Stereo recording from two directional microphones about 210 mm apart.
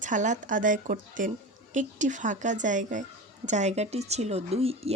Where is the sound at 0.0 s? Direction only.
35° right (ahead or behind).